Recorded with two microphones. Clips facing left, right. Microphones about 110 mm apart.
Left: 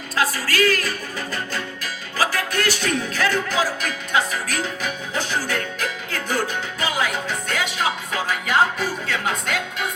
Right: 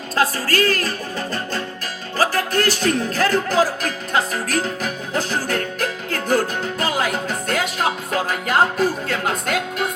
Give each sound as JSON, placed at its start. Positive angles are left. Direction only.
{"t": 0.2, "sound": "music", "side_deg": -45}